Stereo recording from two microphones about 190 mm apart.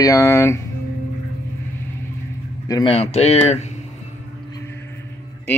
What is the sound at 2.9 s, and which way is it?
Cutlery, 35° left (ahead or behind).